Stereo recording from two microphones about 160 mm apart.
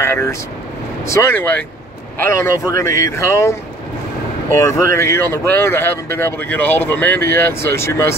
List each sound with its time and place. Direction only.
0.0 s speech: 15° left (ahead or behind)
4.6 s speech: 20° left (ahead or behind)